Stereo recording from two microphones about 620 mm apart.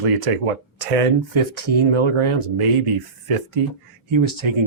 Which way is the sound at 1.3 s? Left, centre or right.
Right.